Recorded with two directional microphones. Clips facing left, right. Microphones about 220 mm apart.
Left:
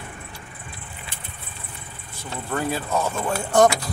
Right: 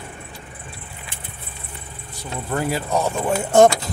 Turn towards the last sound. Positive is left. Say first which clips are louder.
# right 4 dB
turn(degrees=-25)  # may be behind; listen again after turning